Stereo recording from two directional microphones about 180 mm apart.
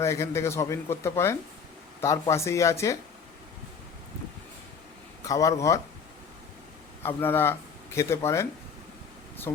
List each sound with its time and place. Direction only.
0.0 s speech: 15° left (ahead or behind)
5.2 s a man's voice: 20° left (ahead or behind)
7.0 s speech: 10° left (ahead or behind)